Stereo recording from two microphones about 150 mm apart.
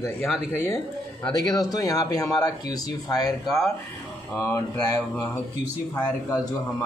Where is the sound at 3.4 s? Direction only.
Centre (ahead or behind).